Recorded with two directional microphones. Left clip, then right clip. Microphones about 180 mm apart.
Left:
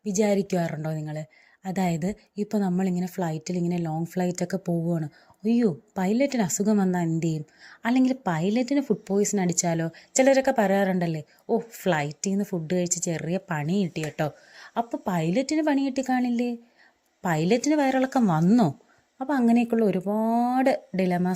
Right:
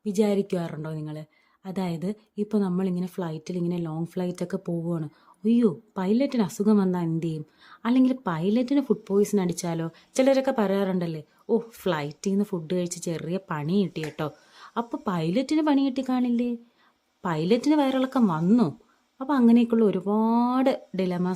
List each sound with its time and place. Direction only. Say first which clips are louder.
0.1 s speech: left 1 dB; 10° left (ahead or behind)
19.2 s speech: right 2 dB; 5° left (ahead or behind)